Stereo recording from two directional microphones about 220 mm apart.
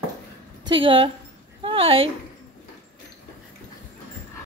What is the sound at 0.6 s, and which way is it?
A woman's voice, 20° right (ahead or behind).